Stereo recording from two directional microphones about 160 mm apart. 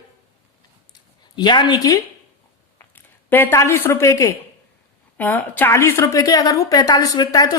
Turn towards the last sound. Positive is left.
turn(degrees=25)  # may be behind; listen again after turning